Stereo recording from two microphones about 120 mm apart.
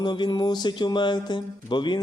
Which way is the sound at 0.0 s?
40° left (ahead or behind).